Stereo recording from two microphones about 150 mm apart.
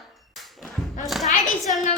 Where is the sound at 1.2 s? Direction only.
60° left (ahead or behind).